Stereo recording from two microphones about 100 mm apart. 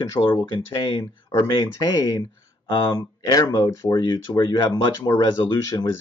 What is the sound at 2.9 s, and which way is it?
Speech, 40° left (ahead or behind).